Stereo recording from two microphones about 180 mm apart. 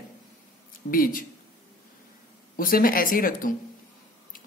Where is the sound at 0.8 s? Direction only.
50° left (ahead or behind).